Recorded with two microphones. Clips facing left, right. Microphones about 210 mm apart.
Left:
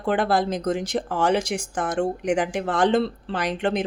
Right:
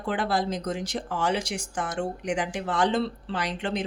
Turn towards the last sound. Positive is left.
turn(degrees=55)  # may be behind; listen again after turning